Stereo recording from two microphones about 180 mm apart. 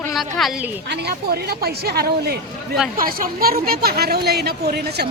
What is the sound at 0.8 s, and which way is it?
A woman's voice, 65° right (ahead or behind).